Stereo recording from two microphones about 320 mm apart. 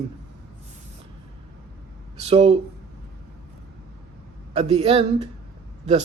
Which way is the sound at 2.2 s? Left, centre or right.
Centre.